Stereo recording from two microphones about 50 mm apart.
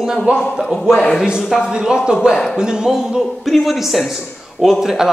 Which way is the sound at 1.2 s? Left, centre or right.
Centre.